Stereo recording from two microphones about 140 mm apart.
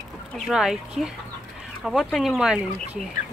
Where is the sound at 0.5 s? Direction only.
5° right (ahead or behind).